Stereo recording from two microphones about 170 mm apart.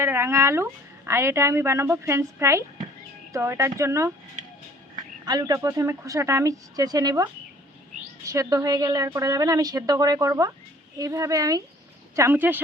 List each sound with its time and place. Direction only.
0.0 s a woman's voice: 15° right (ahead or behind)
5.2 s a woman's voice: 20° right (ahead or behind)